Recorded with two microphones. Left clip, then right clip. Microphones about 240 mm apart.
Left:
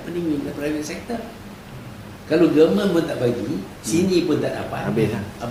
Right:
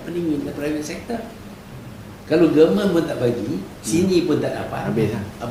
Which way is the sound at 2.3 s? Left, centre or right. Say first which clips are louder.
Right 1 dB; centre.